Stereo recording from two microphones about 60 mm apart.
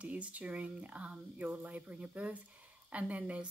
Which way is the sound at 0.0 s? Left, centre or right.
Right.